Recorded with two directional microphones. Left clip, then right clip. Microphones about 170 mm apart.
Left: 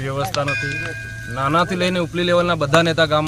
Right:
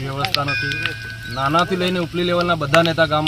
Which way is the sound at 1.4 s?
20° left (ahead or behind).